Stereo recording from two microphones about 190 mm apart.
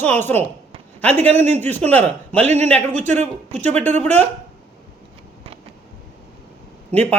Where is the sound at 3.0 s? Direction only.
10° left (ahead or behind).